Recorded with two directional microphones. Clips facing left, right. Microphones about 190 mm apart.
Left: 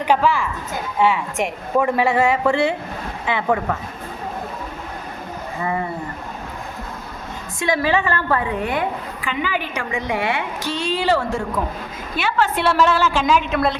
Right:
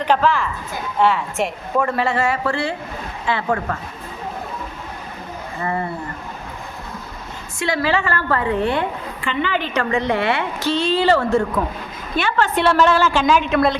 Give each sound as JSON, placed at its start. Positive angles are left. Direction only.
{"t": 0.0, "sound": "a woman's voice", "side_deg": 10}
{"t": 7.6, "sound": "a woman's voice", "side_deg": 15}